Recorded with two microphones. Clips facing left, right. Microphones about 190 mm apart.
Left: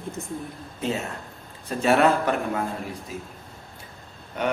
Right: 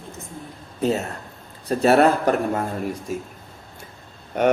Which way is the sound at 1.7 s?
40° right (ahead or behind).